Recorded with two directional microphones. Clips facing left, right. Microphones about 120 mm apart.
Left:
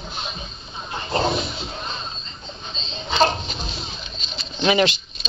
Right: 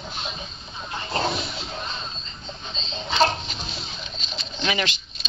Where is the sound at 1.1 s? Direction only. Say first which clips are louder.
Left 4 dB; 25° left (ahead or behind).